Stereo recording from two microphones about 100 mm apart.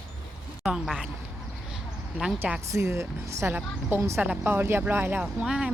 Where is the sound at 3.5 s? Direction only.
20° right (ahead or behind).